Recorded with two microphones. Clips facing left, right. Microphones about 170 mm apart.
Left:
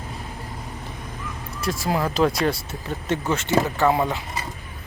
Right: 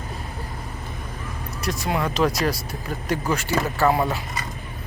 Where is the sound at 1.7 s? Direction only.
30° left (ahead or behind).